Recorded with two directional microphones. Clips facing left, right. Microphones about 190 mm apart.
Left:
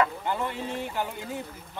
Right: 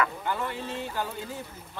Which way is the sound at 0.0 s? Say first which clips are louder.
Left 2 dB; 20° left (ahead or behind).